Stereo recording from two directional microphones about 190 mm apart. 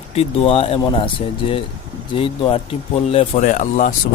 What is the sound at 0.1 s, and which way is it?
Speech, 30° left (ahead or behind).